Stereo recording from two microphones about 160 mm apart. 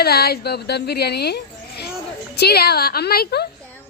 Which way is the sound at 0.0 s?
80° left.